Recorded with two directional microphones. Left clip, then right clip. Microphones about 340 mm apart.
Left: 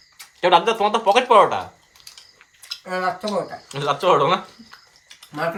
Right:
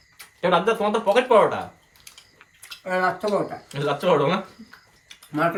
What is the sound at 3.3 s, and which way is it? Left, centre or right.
Speech, centre.